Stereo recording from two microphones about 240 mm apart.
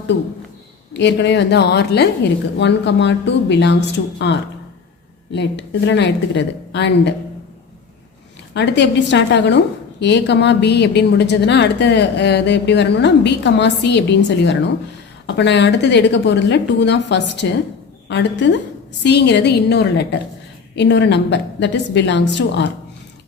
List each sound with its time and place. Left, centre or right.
0.9 s a woman's voice: left
8.5 s a woman's voice: left